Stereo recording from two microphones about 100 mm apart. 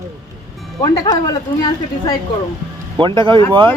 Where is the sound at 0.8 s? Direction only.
40° left (ahead or behind).